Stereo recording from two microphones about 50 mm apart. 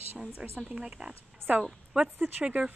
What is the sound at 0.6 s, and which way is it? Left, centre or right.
Speech, centre.